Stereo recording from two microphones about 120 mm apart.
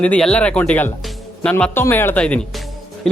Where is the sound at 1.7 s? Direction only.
20° left (ahead or behind).